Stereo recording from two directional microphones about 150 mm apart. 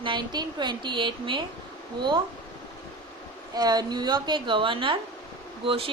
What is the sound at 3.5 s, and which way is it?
A woman's voice, 25° right (ahead or behind).